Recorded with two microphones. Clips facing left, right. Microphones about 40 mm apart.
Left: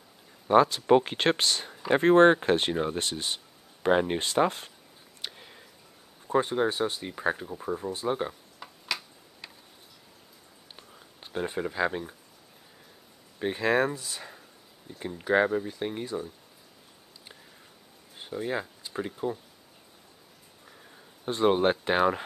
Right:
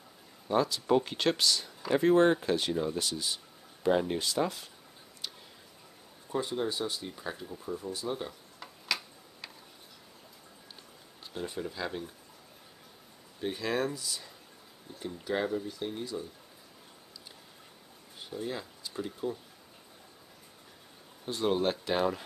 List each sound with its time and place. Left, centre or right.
0.5 s speech: left
5.2 s a sound: left
6.2 s speech: left
8.5 s tick-tock: centre
10.8 s a sound: left
13.4 s speech: left
18.3 s speech: left
21.3 s speech: left